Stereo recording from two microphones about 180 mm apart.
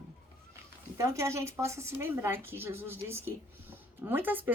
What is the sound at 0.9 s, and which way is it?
A woman's voice, 15° right (ahead or behind).